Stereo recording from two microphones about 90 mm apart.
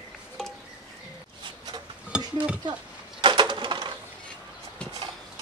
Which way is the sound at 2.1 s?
15° right (ahead or behind).